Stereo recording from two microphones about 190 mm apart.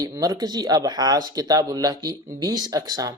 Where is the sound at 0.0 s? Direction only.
20° right (ahead or behind).